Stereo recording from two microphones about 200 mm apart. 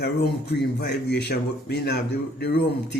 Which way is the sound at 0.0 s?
55° left (ahead or behind).